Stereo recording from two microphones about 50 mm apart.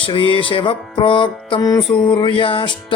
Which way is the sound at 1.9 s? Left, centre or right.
Left.